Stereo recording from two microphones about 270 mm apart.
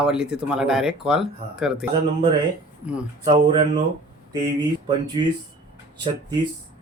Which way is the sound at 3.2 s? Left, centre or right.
Centre.